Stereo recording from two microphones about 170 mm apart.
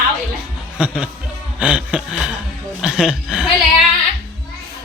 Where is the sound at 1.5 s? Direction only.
10° right (ahead or behind).